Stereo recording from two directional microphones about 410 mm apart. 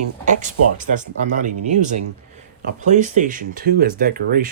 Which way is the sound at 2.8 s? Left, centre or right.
Centre.